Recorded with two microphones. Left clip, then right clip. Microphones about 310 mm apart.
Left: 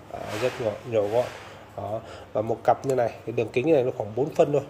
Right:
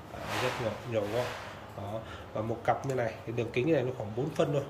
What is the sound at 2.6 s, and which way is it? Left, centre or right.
A man's voice, centre.